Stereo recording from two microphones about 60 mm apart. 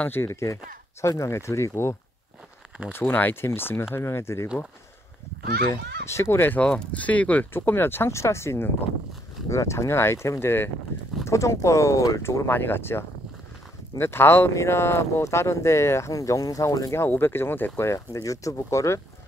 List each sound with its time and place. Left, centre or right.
0.1 s speech: left
2.9 s speech: left
6.0 s speech: left
6.6 s speech: left
7.5 s speech: left
9.5 s speech: left
11.2 s speech: left
12.2 s speech: left
14.5 s speech: left
16.1 s speech: left
17.1 s speech: left
17.8 s speech: left